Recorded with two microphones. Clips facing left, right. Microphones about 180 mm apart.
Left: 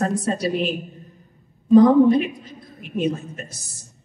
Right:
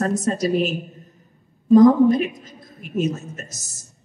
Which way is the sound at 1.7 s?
40° right (ahead or behind).